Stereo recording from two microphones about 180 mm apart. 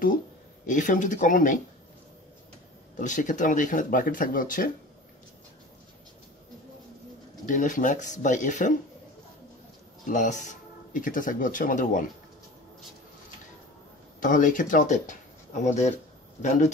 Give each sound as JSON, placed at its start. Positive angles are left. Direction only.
{"t": 0.7, "sound": "speech", "side_deg": 45}
{"t": 3.0, "sound": "speech", "side_deg": 45}
{"t": 7.4, "sound": "speech", "side_deg": 45}
{"t": 10.0, "sound": "speech", "side_deg": 45}
{"t": 14.2, "sound": "a man's voice", "side_deg": 50}